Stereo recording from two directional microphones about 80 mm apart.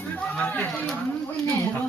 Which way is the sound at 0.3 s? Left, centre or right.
Centre.